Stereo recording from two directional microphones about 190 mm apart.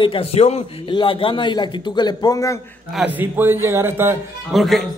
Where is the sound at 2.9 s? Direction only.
5° right (ahead or behind).